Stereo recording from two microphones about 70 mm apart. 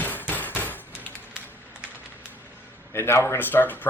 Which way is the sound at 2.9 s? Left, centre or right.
Left.